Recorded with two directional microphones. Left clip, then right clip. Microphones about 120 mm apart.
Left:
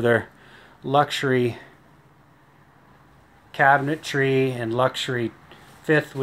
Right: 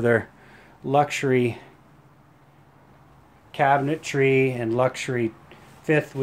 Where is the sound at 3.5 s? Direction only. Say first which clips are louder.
Left 2 dB; 20° right (ahead or behind).